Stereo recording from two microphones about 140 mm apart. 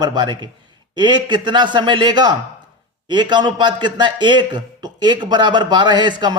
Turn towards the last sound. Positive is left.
turn(degrees=-30)  # may be behind; listen again after turning